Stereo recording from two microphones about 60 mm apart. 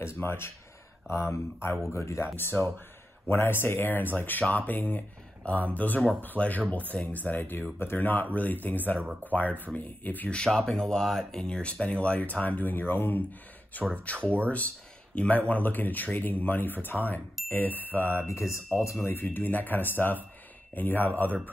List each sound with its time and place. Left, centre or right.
0.0 s speech: left
2.3 s speech: left
10.5 s speech: centre
11.4 s speech: centre; by 13.2 s left
13.9 s speech: left
18.2 s speech: left
18.9 s speech: left